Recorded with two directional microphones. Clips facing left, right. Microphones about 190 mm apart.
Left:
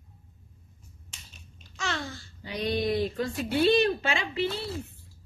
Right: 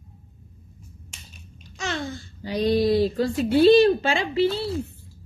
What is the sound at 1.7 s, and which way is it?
Babbling, 20° right (ahead or behind).